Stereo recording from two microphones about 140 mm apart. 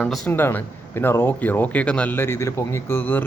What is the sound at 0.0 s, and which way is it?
A man's voice, 10° left (ahead or behind).